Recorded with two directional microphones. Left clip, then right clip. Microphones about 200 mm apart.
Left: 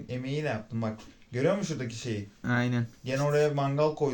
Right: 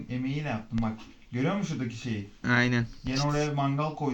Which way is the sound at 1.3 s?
40° left (ahead or behind).